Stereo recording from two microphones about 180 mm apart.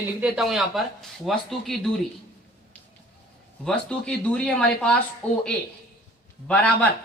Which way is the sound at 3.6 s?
5° left (ahead or behind).